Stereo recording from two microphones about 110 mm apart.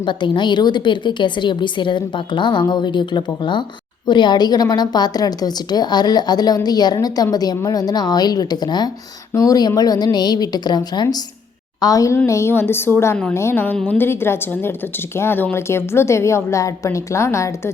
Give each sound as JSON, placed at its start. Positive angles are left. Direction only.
{"t": 0.0, "sound": "a woman's voice", "side_deg": 45}
{"t": 13.7, "sound": "a woman's voice", "side_deg": 5}
{"t": 14.0, "sound": "a woman's voice", "side_deg": 20}